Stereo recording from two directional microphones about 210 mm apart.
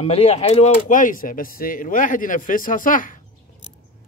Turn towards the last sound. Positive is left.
turn(degrees=40)  # may be behind; listen again after turning